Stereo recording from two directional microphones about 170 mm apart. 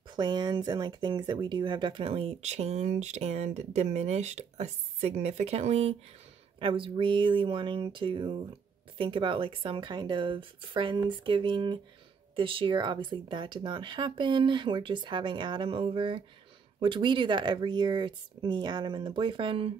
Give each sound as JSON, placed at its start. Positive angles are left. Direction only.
{"t": 0.1, "sound": "speech", "side_deg": -25}